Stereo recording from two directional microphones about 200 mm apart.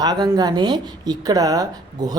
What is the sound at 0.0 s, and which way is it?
A woman's voice, 15° right (ahead or behind).